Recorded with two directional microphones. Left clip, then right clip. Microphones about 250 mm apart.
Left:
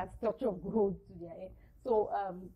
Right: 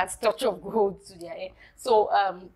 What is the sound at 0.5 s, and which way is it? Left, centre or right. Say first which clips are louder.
Speech: right 8 dB; right.